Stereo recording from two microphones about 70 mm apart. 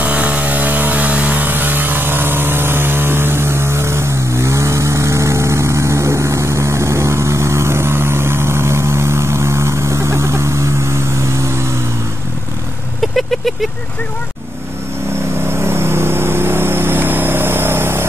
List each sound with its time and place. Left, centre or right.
0.0 s vehicle: centre; by 11.7 s right
13.0 s vehicle: centre
15.4 s vehicle: right